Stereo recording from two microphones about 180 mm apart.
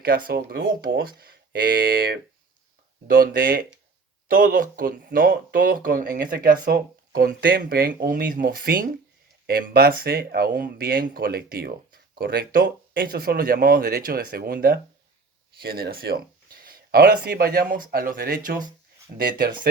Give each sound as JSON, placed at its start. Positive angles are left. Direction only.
{"t": 0.0, "sound": "speech", "side_deg": -55}